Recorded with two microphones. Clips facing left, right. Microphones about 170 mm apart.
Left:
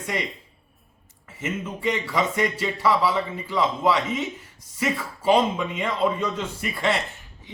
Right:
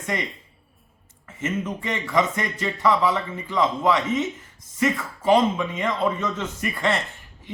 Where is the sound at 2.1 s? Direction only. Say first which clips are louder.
Right 5 dB; 10° left (ahead or behind).